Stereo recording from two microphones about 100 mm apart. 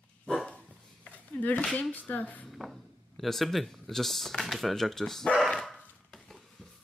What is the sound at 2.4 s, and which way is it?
Speech, centre (ahead or behind).